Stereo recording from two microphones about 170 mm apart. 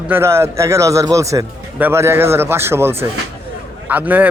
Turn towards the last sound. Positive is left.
turn(degrees=-10)  # may be behind; listen again after turning